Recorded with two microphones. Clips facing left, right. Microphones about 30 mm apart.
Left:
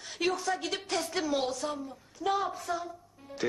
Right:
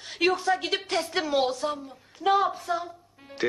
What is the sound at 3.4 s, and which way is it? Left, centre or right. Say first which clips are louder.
Music: right 5 dB; right.